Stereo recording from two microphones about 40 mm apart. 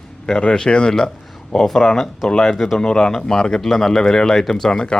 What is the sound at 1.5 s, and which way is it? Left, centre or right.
Speech, centre.